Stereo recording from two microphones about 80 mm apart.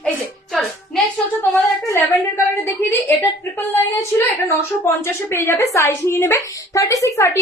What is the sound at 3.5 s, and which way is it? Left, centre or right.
A woman's voice, left.